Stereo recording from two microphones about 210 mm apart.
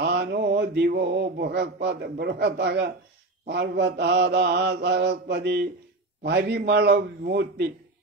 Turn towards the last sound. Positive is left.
turn(degrees=-55)  # may be behind; listen again after turning